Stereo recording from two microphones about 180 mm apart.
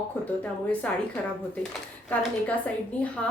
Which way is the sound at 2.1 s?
10° left (ahead or behind).